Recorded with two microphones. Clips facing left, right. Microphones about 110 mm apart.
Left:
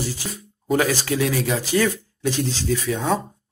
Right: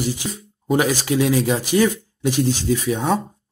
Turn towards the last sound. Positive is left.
turn(degrees=-15)  # may be behind; listen again after turning